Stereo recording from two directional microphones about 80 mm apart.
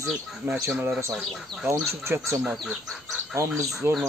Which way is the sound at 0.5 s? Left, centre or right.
Right.